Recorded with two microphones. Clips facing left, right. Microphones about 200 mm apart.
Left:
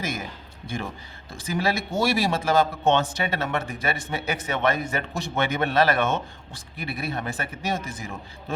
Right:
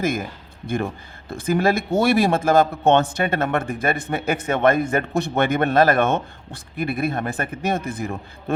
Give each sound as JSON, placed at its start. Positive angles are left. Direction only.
{"t": 0.0, "sound": "speech", "side_deg": -55}
{"t": 1.3, "sound": "speech", "side_deg": -55}